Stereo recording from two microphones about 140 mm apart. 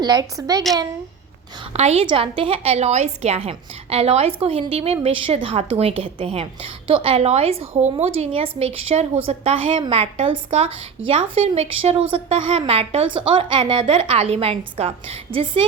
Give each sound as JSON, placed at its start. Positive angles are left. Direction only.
{"t": 0.0, "sound": "a woman's voice", "side_deg": -30}
{"t": 1.7, "sound": "a woman's voice", "side_deg": -50}
{"t": 2.0, "sound": "a woman's voice", "side_deg": -40}